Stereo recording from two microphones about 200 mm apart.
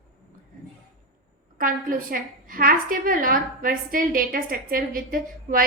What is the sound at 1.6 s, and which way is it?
A woman's voice, 45° right (ahead or behind).